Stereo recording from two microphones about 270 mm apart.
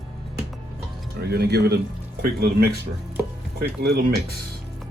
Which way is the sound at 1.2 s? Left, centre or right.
Right.